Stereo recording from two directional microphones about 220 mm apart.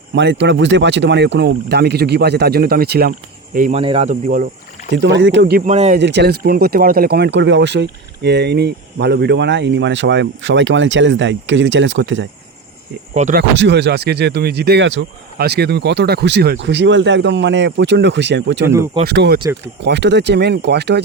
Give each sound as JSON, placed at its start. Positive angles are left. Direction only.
{"t": 0.1, "sound": "speech", "side_deg": -55}
{"t": 4.9, "sound": "speech", "side_deg": -50}
{"t": 6.0, "sound": "speech", "side_deg": -50}
{"t": 13.1, "sound": "speech", "side_deg": -35}
{"t": 13.6, "sound": "speech", "side_deg": -50}